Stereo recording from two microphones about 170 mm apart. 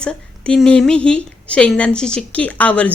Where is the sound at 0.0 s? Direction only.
5° left (ahead or behind).